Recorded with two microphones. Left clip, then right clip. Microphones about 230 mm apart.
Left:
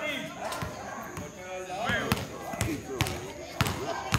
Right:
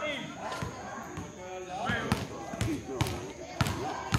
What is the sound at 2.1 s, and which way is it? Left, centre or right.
Basketball bounce, centre.